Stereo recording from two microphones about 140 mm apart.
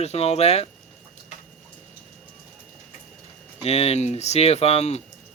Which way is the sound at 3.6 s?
50° left (ahead or behind).